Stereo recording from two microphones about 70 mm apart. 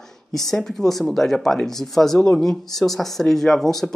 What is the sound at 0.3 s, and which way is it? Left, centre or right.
Speech, centre.